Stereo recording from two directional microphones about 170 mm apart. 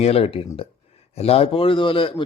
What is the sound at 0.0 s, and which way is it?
Speech, 35° left (ahead or behind).